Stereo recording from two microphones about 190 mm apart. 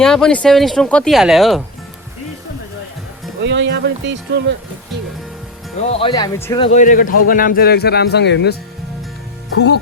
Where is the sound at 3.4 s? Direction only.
70° right (ahead or behind).